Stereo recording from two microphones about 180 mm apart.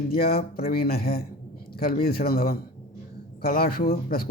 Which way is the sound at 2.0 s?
60° left (ahead or behind).